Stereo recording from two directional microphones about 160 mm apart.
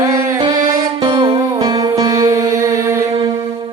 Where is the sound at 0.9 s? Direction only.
35° right (ahead or behind); by 3.2 s 20° right (ahead or behind).